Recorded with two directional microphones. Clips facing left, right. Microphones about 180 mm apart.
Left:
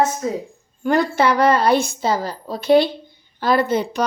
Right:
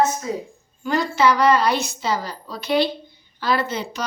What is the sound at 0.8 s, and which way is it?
A woman's voice, 55° left (ahead or behind).